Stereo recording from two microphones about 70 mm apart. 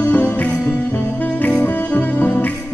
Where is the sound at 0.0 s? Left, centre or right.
Left.